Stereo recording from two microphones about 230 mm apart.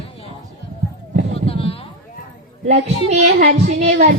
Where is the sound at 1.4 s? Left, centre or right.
Left.